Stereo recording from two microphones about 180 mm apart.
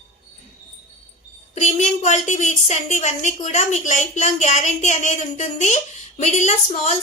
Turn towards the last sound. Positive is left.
turn(degrees=40)  # may be behind; listen again after turning